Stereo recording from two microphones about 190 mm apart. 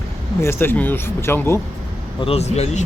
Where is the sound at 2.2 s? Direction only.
30° left (ahead or behind).